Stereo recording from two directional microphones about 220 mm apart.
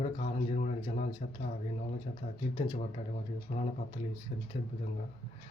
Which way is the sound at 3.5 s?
30° left (ahead or behind).